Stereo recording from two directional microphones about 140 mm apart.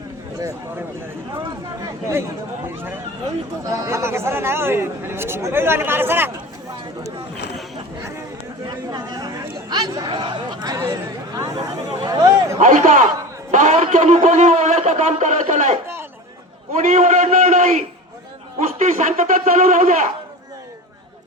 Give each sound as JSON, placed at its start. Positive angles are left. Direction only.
{"t": 1.8, "sound": "speech", "side_deg": -20}
{"t": 8.6, "sound": "speech", "side_deg": -30}
{"t": 12.5, "sound": "a man's voice", "side_deg": -70}
{"t": 16.9, "sound": "a man's voice", "side_deg": -60}